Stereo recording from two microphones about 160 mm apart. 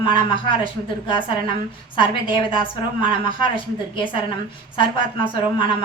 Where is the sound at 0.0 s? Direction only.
30° left (ahead or behind).